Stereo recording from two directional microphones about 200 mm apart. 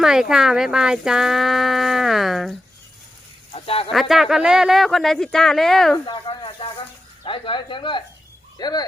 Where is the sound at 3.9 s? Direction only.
Centre (ahead or behind).